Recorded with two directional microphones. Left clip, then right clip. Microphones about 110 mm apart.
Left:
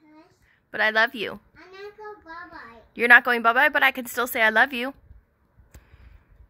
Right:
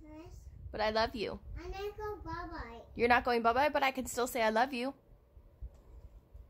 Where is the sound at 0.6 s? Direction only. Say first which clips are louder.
Left 11 dB; 25° left (ahead or behind).